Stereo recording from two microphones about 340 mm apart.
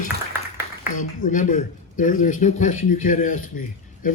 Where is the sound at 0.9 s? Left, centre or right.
Left.